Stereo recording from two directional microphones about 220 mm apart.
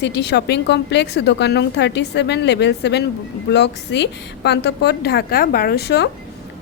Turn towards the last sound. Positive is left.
turn(degrees=45)  # may be behind; listen again after turning